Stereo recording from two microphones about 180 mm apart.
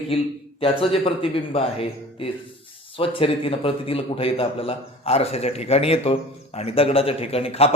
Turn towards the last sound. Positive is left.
turn(degrees=35)  # may be behind; listen again after turning